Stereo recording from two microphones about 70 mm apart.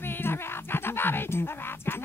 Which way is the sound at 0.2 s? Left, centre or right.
Left.